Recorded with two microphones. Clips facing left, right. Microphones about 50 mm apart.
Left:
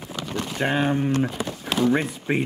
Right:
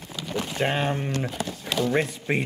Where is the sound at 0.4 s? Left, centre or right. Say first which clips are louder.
Left 2 dB; centre.